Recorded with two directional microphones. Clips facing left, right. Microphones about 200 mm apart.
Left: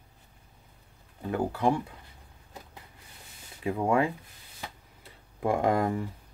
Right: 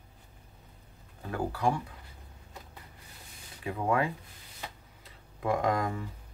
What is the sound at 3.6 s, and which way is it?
Speech, 25° left (ahead or behind).